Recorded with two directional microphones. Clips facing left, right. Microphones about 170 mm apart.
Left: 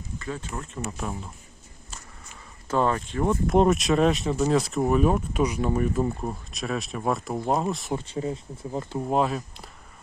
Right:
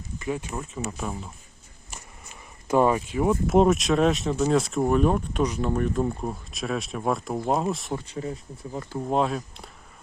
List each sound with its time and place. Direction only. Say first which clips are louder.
0.2 s speech: right 4 dB; 15° right (ahead or behind)
0.7 s speech: left 1 dB; centre (ahead or behind)
2.6 s speech: right 3 dB; 10° right (ahead or behind)
7.9 s speech: left 2 dB; 30° left (ahead or behind)
9.0 s speech: even; 5° left (ahead or behind)